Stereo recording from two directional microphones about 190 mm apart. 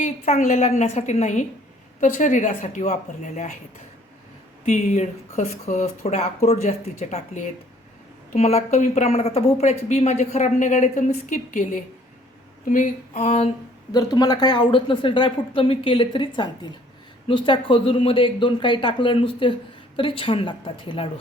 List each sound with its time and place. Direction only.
0.0 s a woman's voice: 40° left (ahead or behind)
4.6 s a woman's voice: 35° left (ahead or behind)
13.9 s speech: 20° left (ahead or behind)